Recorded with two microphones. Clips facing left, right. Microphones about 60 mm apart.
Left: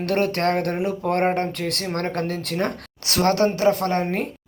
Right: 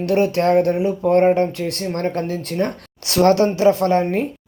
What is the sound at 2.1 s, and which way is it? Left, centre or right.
Speech, left.